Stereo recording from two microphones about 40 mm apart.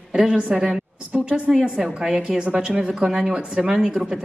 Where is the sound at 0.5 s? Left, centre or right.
Centre.